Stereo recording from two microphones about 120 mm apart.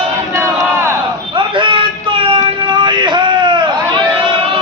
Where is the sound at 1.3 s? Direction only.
45° right (ahead or behind).